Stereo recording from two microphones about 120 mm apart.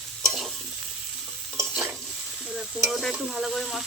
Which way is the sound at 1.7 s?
15° right (ahead or behind).